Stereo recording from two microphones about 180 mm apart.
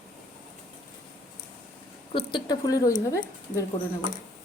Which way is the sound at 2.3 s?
25° left (ahead or behind).